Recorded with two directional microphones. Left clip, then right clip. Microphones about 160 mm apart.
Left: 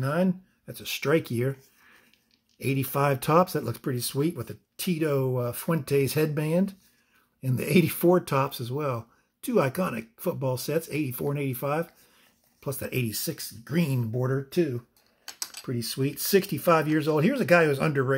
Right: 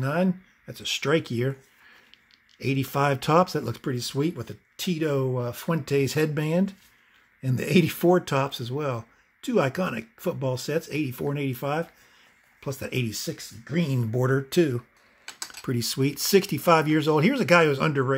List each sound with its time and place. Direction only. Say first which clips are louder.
0.0 s speech: right 1 dB; centre (ahead or behind)
14.1 s speech: right 5 dB; 25° right (ahead or behind); by 18.1 s centre (ahead or behind)